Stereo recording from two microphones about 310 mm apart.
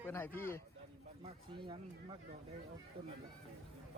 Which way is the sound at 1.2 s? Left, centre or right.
Centre.